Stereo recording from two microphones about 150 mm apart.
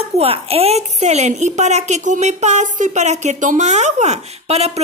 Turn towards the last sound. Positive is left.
turn(degrees=-45)  # may be behind; listen again after turning